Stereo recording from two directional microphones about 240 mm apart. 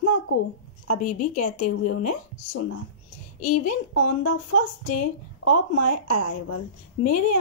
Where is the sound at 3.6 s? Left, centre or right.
Left.